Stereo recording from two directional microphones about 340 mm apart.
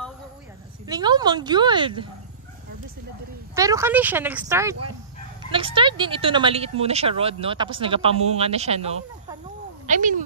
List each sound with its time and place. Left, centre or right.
0.8 s speech: centre
3.5 s speech: centre